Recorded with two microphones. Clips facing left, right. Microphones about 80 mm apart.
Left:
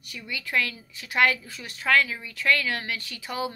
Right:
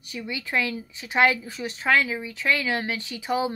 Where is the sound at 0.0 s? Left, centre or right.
Right.